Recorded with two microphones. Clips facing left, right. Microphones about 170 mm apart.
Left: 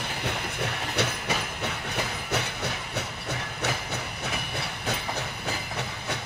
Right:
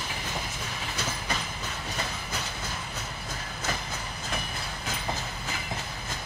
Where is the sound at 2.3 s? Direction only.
70° left (ahead or behind).